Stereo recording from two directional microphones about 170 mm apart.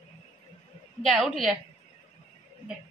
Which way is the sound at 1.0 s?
Centre (ahead or behind).